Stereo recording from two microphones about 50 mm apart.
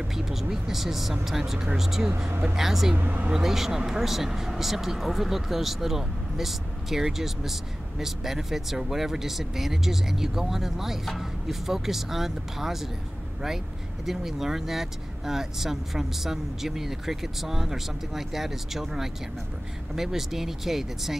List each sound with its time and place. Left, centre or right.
0.1 s speech: centre
3.0 s speech: right
3.3 s speech: centre
14.0 s speech: centre